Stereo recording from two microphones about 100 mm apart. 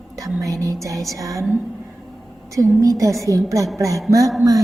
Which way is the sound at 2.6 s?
35° right (ahead or behind).